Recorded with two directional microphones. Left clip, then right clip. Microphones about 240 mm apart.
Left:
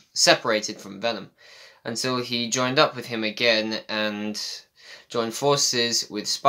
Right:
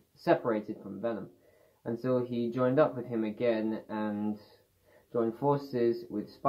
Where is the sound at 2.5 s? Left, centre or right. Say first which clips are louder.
Left 6 dB; left.